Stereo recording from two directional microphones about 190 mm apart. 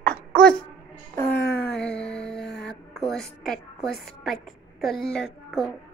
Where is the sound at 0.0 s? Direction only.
50° right (ahead or behind).